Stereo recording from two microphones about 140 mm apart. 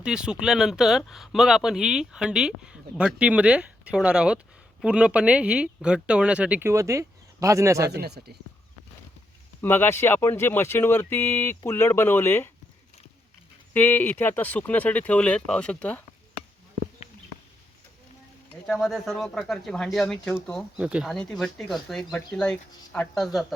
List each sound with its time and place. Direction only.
0.0 s speech: 5° right (ahead or behind); by 7.9 s 20° right (ahead or behind)
8.2 s speech: 90° right
9.6 s speech: 15° left (ahead or behind)
13.7 s speech: 15° left (ahead or behind)
18.6 s speech: centre (ahead or behind)
20.7 s speech: 10° right (ahead or behind)
21.1 s speech: 5° left (ahead or behind)